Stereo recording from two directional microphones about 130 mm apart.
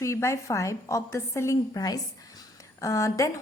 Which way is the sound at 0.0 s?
20° left (ahead or behind).